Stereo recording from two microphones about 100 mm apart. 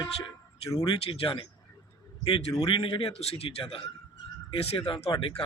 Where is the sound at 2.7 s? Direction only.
55° left (ahead or behind).